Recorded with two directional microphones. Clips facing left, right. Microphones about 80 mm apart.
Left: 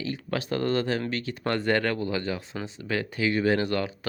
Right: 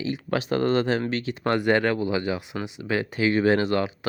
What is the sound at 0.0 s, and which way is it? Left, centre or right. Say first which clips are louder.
Speech: right 4 dB; right.